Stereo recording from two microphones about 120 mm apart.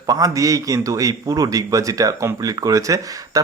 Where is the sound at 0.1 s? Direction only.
30° right (ahead or behind).